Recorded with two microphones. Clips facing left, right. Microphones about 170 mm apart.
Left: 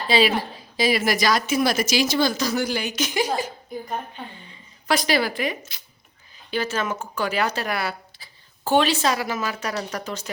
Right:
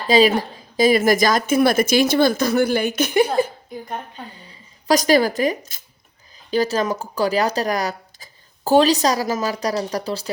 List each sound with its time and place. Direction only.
0.1 s a woman's voice: 45° right (ahead or behind)
4.2 s speech: 35° right (ahead or behind)